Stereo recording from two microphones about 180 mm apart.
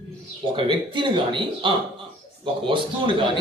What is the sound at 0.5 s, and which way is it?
A man's voice, 25° right (ahead or behind).